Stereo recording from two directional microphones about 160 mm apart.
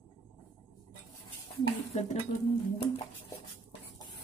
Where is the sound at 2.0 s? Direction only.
45° left (ahead or behind).